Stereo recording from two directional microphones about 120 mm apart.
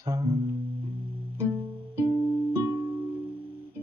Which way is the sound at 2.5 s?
30° right (ahead or behind).